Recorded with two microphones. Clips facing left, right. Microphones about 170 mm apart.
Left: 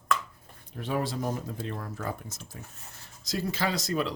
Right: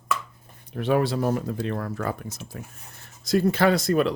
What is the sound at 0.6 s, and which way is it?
Speech, 70° right (ahead or behind).